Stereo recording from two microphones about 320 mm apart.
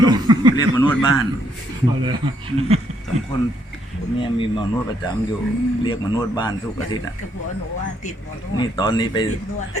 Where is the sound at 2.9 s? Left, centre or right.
Centre.